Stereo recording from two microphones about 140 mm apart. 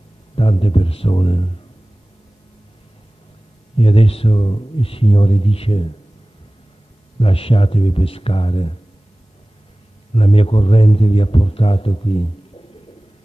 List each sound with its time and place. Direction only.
0.4 s speech: 40° left (ahead or behind)
3.7 s speech: 40° left (ahead or behind)
7.2 s speech: 40° left (ahead or behind)
10.1 s speech: 40° left (ahead or behind)